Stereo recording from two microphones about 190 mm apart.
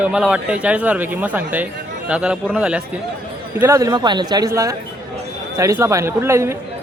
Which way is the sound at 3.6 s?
15° right (ahead or behind).